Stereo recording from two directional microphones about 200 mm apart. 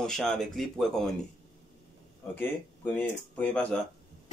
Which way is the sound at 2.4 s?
5° left (ahead or behind).